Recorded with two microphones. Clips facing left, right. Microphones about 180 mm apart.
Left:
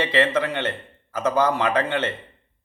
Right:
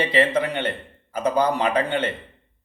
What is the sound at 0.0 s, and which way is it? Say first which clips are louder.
A man's voice: right 1 dB; 15° right (ahead or behind).